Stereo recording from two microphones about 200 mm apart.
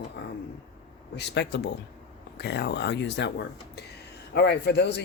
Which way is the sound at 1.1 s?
60° left (ahead or behind).